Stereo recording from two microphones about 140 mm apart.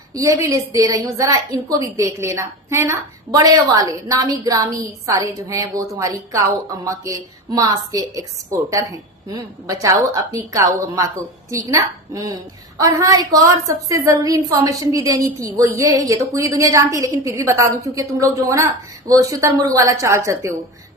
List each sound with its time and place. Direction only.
0.1 s a woman's voice: 25° right (ahead or behind)